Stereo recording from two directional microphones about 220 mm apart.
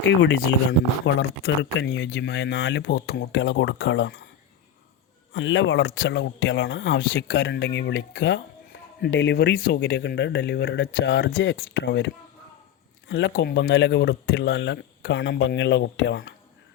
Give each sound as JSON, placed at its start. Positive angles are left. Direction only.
{"t": 0.0, "sound": "speech", "side_deg": 55}
{"t": 5.3, "sound": "speech", "side_deg": 60}